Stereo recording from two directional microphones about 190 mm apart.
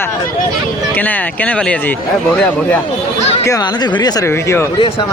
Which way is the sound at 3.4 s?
20° left (ahead or behind).